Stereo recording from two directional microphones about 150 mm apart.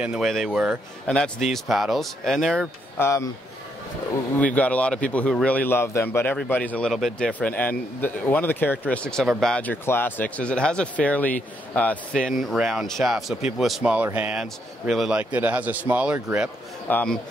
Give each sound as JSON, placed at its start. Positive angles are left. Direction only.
{"t": 0.0, "sound": "a man's voice", "side_deg": -5}
{"t": 3.0, "sound": "speech", "side_deg": 20}
{"t": 4.4, "sound": "a man's voice", "side_deg": 10}
{"t": 16.8, "sound": "speech", "side_deg": 10}